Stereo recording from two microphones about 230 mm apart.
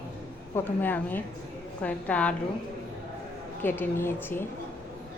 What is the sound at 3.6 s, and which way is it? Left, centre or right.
Speech, centre.